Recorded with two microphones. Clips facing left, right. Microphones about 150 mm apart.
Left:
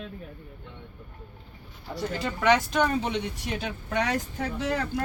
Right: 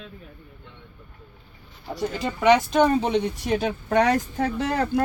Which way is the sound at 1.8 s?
15° right (ahead or behind).